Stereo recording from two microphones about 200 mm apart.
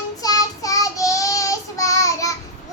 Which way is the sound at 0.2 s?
20° left (ahead or behind).